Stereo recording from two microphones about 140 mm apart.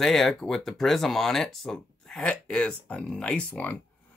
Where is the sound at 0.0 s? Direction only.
Centre (ahead or behind).